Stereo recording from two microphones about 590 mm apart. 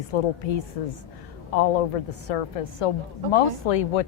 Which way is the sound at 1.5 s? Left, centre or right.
Left.